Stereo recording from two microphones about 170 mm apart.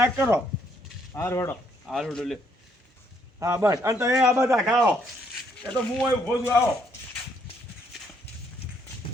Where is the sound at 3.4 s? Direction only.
20° right (ahead or behind).